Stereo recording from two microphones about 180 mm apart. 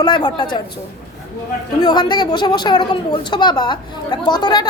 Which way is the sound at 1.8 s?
25° left (ahead or behind).